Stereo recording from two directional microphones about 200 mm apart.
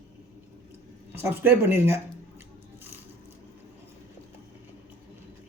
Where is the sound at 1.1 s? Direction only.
10° right (ahead or behind).